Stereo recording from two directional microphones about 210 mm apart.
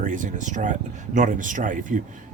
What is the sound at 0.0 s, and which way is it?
Speech, 40° right (ahead or behind).